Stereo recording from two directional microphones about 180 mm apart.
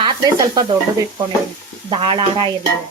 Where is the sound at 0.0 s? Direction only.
25° right (ahead or behind).